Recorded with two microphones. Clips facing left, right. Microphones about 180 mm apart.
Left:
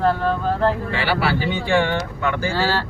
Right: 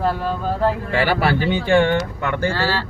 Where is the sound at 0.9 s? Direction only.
45° right (ahead or behind).